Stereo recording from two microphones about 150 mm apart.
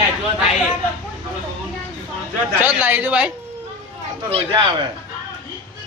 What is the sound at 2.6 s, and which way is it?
Speech, 15° right (ahead or behind).